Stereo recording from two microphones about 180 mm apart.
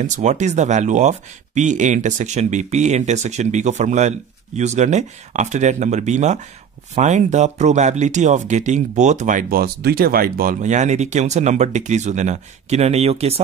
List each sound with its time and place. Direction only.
0.0 s speech: 40° right (ahead or behind)